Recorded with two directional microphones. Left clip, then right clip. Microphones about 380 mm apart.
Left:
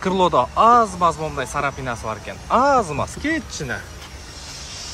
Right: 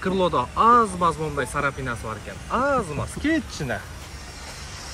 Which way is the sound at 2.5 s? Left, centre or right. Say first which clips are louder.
Left 7 dB; left.